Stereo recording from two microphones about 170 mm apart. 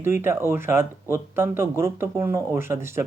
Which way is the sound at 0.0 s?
15° right (ahead or behind).